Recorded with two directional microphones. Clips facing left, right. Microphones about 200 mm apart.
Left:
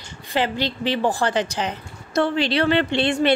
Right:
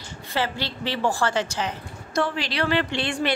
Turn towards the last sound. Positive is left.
turn(degrees=25)  # may be behind; listen again after turning